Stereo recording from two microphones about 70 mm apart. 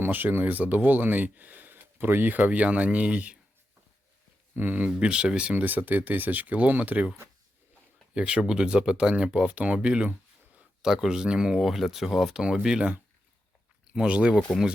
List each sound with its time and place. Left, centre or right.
0.0 s speech: right
4.5 s speech: right
4.9 s speech: centre
5.6 s speech: right